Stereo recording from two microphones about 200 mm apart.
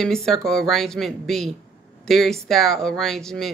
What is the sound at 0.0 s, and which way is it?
Speech, centre (ahead or behind).